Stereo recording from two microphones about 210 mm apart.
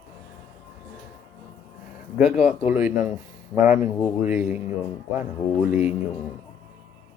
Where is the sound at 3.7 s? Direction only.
35° left (ahead or behind).